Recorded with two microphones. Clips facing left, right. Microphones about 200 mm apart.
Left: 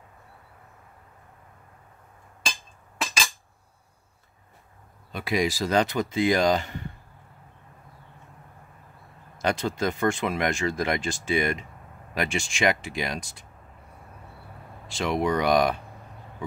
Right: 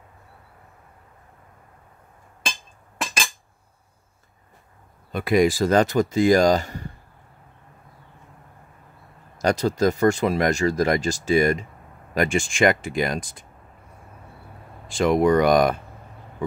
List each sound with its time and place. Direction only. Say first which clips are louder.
5.1 s speech: right 7 dB; 50° right (ahead or behind)
9.4 s speech: right 6 dB; 40° right (ahead or behind)
14.9 s speech: right 7 dB; 50° right (ahead or behind)